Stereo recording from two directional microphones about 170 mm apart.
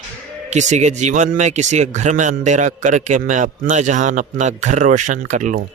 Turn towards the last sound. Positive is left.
turn(degrees=-45)  # may be behind; listen again after turning